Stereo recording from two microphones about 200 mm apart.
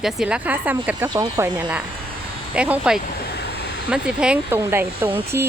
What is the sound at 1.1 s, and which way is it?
Speech, 20° right (ahead or behind).